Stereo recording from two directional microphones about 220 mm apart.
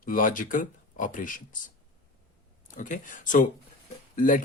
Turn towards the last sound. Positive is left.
turn(degrees=40)  # may be behind; listen again after turning